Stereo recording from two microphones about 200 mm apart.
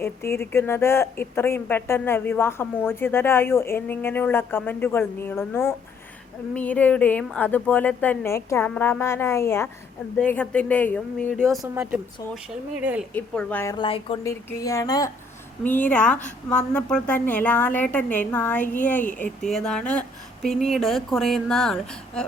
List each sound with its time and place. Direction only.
0.0 s a woman's voice: 10° left (ahead or behind); by 12.4 s 5° right (ahead or behind)
13.1 s a woman's voice: 5° left (ahead or behind)
13.7 s speech: 25° left (ahead or behind)
14.3 s a woman's voice: 15° left (ahead or behind)